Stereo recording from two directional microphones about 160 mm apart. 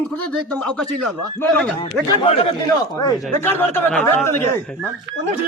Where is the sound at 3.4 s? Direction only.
15° left (ahead or behind).